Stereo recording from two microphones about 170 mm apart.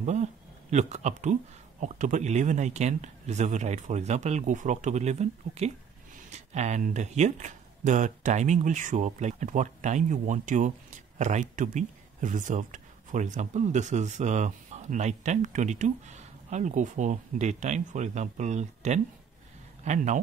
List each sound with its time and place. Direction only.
0.0 s speech: 45° right (ahead or behind)